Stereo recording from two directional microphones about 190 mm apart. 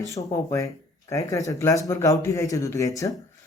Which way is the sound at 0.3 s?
15° left (ahead or behind).